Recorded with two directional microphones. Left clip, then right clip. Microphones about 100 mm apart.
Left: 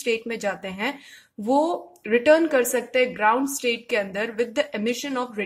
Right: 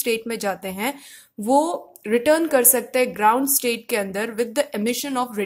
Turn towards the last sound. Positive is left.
turn(degrees=-35)  # may be behind; listen again after turning